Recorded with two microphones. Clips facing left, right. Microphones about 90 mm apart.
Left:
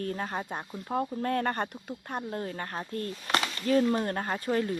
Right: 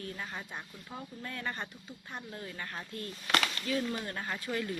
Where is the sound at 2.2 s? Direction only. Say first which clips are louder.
Left 8 dB; 40° left (ahead or behind).